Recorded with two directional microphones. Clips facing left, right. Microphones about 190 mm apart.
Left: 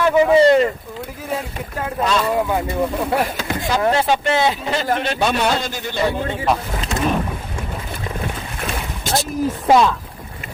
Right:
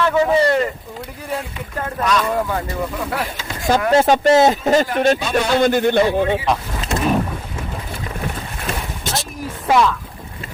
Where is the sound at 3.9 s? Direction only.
45° right (ahead or behind).